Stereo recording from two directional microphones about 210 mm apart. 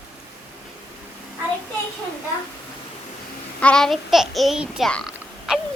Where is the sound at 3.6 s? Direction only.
5° left (ahead or behind).